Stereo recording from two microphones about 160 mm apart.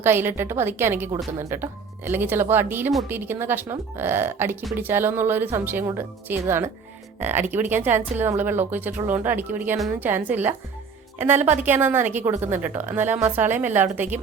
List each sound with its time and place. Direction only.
0.0 s a woman's voice: 15° right (ahead or behind)